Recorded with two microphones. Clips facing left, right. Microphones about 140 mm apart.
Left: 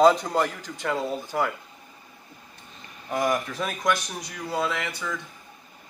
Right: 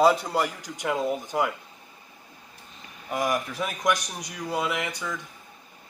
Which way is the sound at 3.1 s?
10° right (ahead or behind).